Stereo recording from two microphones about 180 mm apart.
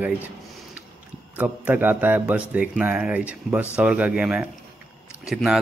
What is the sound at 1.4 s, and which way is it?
A man's voice, 10° right (ahead or behind).